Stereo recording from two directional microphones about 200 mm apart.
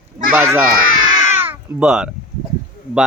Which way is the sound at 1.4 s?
10° right (ahead or behind).